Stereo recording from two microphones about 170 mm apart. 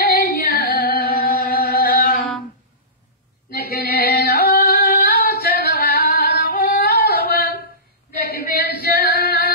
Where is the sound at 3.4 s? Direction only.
60° left (ahead or behind).